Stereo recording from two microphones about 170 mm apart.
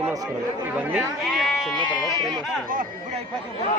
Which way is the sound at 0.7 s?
5° right (ahead or behind).